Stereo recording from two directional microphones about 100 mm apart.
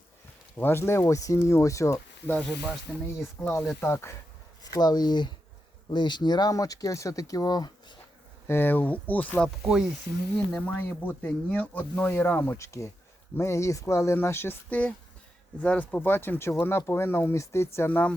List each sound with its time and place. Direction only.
0.5 s speech: 20° left (ahead or behind)
2.4 s speech: 5° left (ahead or behind)
3.7 s speech: 25° left (ahead or behind)
4.6 s speech: 40° left (ahead or behind)
8.4 s speech: 20° left (ahead or behind)
17.7 s speech: 20° left (ahead or behind)